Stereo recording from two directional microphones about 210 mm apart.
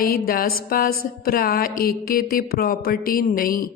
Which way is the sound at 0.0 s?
45° left (ahead or behind).